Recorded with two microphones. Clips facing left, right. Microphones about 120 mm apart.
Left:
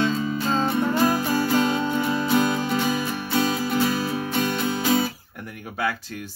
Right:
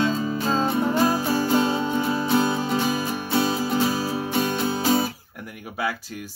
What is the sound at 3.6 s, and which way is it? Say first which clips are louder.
Music: even; 25° right (ahead or behind).